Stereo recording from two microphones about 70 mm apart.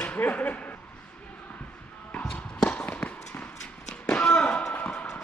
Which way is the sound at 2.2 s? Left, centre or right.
Centre.